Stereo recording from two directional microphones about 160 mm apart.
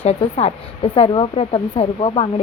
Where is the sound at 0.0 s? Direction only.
40° left (ahead or behind).